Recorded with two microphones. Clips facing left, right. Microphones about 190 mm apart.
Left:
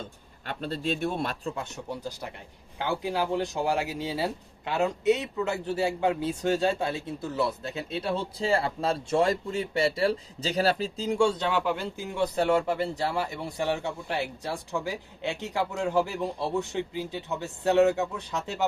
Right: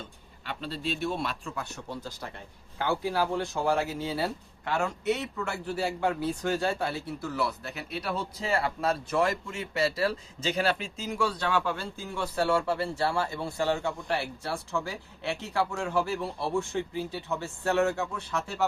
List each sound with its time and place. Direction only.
0.4 s a man's voice: 50° left (ahead or behind)
1.5 s speech: 20° left (ahead or behind)